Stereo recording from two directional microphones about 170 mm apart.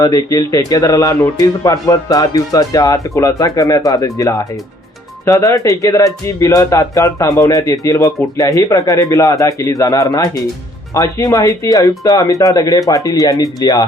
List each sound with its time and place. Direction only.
0.0 s speech: 20° left (ahead or behind)